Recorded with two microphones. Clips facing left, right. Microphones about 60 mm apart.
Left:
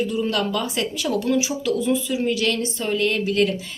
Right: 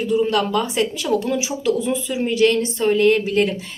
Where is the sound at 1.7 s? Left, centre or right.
Right.